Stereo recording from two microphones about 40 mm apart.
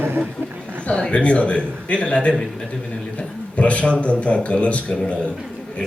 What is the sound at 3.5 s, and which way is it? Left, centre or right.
Speech, left.